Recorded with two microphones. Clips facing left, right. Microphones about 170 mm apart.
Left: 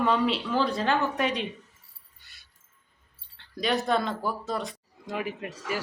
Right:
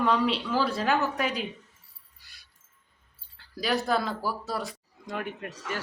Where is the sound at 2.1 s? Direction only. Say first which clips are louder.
Right 1 dB; centre (ahead or behind).